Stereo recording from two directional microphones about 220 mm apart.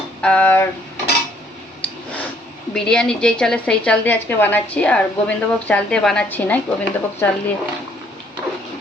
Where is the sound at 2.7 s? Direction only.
5° left (ahead or behind).